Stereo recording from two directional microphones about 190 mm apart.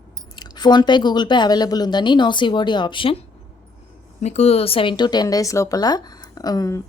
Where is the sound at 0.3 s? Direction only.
20° left (ahead or behind).